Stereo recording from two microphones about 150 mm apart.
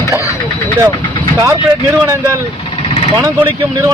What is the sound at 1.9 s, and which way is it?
A man's voice, 20° right (ahead or behind).